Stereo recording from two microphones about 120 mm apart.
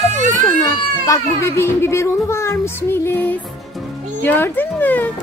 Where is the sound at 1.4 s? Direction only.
20° left (ahead or behind).